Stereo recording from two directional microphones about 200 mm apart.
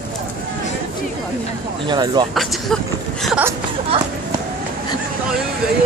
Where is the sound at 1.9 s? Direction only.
20° right (ahead or behind).